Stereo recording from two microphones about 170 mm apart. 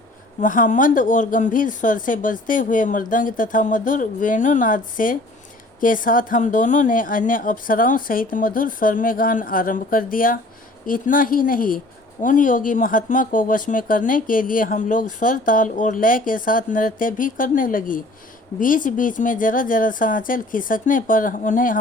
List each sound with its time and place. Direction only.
0.3 s speech: 50° left (ahead or behind)